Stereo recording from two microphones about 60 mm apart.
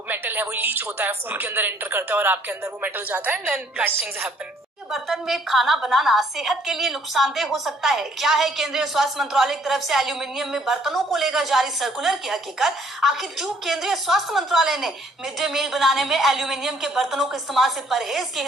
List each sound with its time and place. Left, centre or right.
0.1 s a woman's voice: right
4.9 s a woman's voice: centre